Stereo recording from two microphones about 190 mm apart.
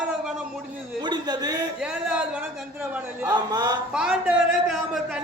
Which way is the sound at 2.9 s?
10° right (ahead or behind).